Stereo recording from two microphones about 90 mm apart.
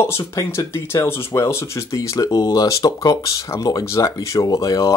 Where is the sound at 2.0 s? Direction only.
40° left (ahead or behind).